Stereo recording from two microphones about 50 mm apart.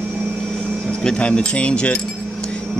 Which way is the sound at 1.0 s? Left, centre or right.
Centre.